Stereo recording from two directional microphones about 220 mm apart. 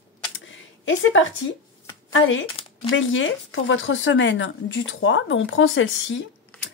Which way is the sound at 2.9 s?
60° left (ahead or behind).